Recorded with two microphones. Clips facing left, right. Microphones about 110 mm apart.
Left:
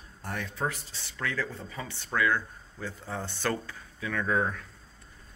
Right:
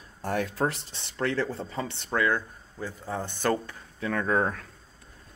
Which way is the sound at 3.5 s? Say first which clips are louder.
Right 5 dB; 40° right (ahead or behind).